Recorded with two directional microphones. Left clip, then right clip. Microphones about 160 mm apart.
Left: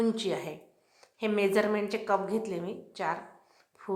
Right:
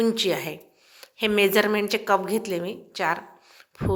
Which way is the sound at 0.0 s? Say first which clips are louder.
Right 7 dB; 15° right (ahead or behind).